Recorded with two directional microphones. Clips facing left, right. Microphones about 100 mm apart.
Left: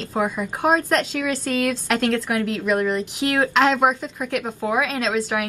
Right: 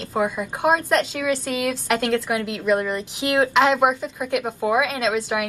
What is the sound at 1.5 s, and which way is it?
A woman's voice, 15° right (ahead or behind).